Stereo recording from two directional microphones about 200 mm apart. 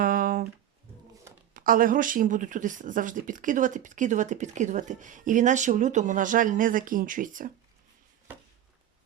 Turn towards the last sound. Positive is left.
turn(degrees=-40)  # may be behind; listen again after turning